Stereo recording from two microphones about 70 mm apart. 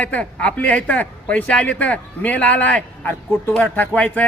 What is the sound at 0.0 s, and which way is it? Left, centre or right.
A man's voice, centre.